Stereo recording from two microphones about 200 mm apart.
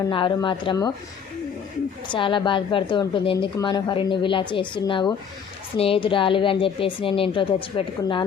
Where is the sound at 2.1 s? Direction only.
25° left (ahead or behind).